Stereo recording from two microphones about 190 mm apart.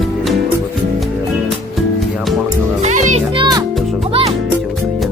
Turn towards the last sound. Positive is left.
turn(degrees=-30)  # may be behind; listen again after turning